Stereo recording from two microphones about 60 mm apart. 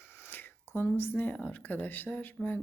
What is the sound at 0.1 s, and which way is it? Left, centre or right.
Speech, left.